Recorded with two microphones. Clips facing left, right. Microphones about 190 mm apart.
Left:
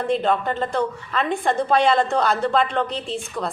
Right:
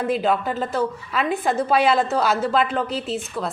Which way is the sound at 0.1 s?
5° right (ahead or behind).